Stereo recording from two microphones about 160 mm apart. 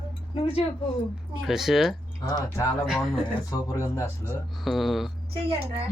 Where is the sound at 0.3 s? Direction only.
35° left (ahead or behind).